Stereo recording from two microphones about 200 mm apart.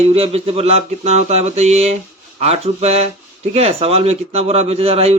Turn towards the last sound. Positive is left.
turn(degrees=-30)  # may be behind; listen again after turning